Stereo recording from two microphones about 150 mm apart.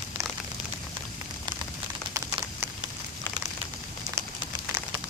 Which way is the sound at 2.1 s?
20° right (ahead or behind).